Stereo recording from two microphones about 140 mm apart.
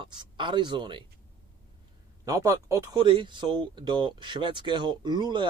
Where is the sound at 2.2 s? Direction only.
20° right (ahead or behind).